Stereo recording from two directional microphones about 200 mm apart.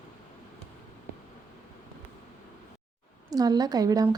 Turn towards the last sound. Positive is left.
turn(degrees=-15)  # may be behind; listen again after turning